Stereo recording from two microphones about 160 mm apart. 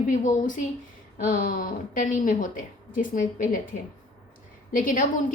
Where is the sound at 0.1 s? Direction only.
55° left (ahead or behind).